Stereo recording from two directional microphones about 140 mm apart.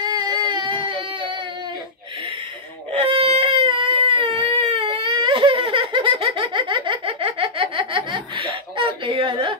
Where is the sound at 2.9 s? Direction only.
45° right (ahead or behind).